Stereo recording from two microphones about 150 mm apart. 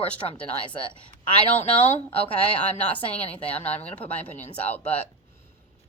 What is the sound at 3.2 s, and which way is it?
A woman's voice, 10° left (ahead or behind).